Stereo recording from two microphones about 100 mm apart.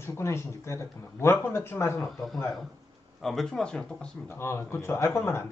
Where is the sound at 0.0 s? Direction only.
25° left (ahead or behind).